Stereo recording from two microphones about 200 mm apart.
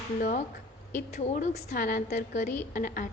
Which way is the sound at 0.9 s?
40° left (ahead or behind).